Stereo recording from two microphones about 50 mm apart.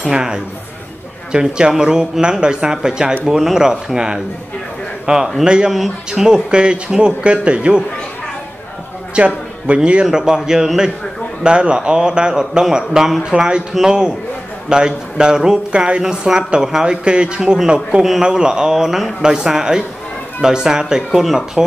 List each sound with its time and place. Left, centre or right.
0.1 s a man's voice: centre
5.7 s speech: centre
6.2 s a man's voice: centre
9.1 s a man's voice: right
10.0 s a man's voice: centre